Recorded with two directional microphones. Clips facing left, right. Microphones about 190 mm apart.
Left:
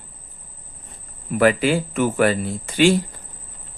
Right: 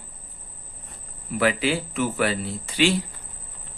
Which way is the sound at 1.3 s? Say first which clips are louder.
Left 5 dB; 50° left (ahead or behind).